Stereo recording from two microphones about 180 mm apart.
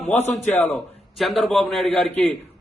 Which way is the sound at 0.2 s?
10° left (ahead or behind).